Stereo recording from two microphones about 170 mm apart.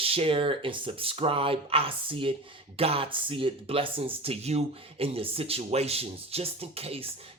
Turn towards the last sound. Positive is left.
turn(degrees=-35)  # may be behind; listen again after turning